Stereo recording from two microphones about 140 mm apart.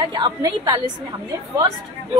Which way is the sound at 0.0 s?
30° right (ahead or behind).